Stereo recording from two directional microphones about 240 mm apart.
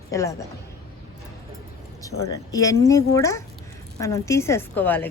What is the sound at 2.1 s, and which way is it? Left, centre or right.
Speech, left.